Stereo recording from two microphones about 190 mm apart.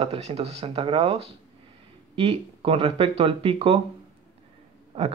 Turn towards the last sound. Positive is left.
turn(degrees=-35)  # may be behind; listen again after turning